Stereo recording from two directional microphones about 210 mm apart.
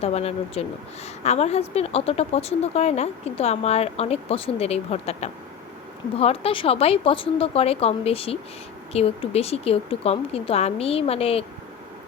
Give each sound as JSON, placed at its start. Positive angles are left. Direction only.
{"t": 0.0, "sound": "a woman's voice", "side_deg": 30}